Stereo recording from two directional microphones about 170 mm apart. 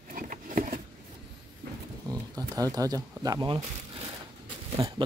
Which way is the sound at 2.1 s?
20° right (ahead or behind).